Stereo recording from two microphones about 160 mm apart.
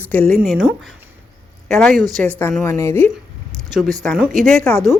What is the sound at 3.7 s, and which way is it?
A woman's voice, centre (ahead or behind).